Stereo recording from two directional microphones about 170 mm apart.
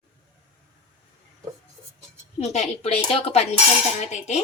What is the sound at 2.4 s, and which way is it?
Speech, 40° left (ahead or behind).